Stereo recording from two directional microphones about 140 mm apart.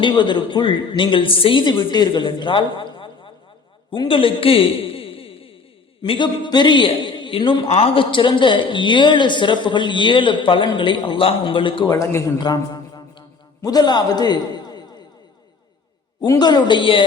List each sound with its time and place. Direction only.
0.0 s a man's voice: 35° left (ahead or behind)
11.9 s a sound: 25° left (ahead or behind)
16.2 s a man's voice: 25° left (ahead or behind)